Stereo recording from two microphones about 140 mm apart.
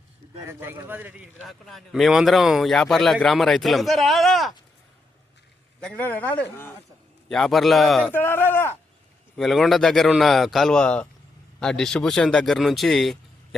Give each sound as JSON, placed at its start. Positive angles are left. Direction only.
{"t": 0.4, "sound": "a man's voice", "side_deg": -15}
{"t": 1.5, "sound": "speech", "side_deg": 0}
{"t": 5.8, "sound": "speech", "side_deg": 10}
{"t": 7.3, "sound": "speech", "side_deg": 5}
{"t": 8.1, "sound": "speech", "side_deg": 15}
{"t": 9.3, "sound": "speech", "side_deg": 0}